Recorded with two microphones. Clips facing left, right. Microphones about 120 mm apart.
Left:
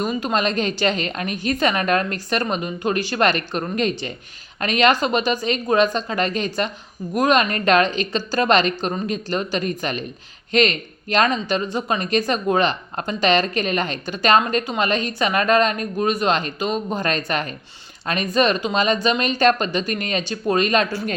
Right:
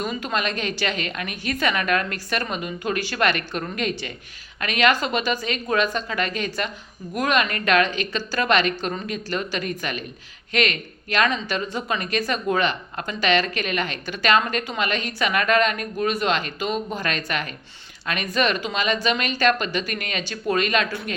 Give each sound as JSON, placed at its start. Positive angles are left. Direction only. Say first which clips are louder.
{"t": 0.0, "sound": "a woman's voice", "louder": "left 4 dB", "side_deg": 25}